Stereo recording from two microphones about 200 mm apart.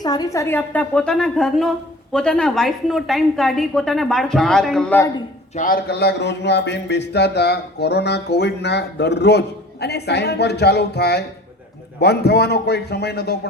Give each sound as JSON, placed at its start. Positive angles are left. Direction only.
{"t": 0.0, "sound": "a woman's voice", "side_deg": 20}
{"t": 5.5, "sound": "a man's voice", "side_deg": 45}